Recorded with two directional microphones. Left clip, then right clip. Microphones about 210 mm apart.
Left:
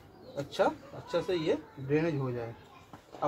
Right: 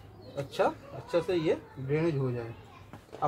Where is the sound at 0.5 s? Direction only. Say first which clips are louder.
Even; 20° right (ahead or behind).